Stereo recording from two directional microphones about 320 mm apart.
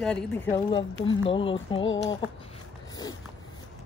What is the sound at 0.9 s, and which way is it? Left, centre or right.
Speech, left.